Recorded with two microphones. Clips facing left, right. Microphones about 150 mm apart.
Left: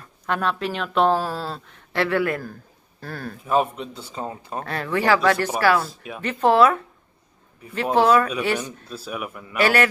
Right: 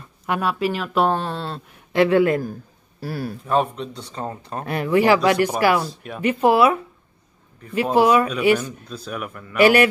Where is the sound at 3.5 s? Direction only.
5° left (ahead or behind).